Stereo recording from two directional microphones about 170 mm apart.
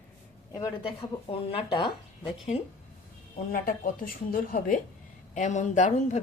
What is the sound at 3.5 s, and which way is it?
A woman's voice, 55° left (ahead or behind).